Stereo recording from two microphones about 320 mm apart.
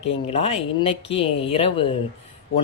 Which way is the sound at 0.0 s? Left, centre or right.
Centre.